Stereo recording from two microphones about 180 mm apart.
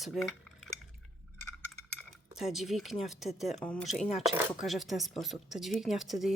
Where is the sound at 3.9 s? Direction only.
40° left (ahead or behind).